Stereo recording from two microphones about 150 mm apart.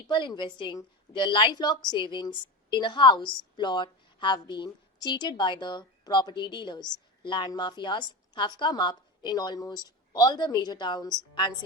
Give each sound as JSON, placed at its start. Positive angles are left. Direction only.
{"t": 0.1, "sound": "a woman's voice", "side_deg": 30}